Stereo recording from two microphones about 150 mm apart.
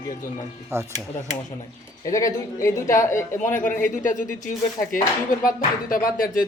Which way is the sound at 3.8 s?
60° left (ahead or behind).